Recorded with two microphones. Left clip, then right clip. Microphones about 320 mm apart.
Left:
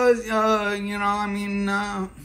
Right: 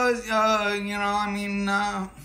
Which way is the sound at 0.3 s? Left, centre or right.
Right.